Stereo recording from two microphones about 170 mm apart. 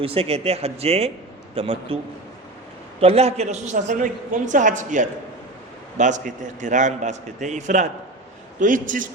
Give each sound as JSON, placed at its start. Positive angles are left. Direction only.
{"t": 0.0, "sound": "speech", "side_deg": -35}
{"t": 3.0, "sound": "a man's voice", "side_deg": -35}